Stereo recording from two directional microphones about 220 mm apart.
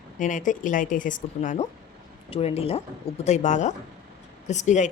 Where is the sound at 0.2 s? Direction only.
35° left (ahead or behind).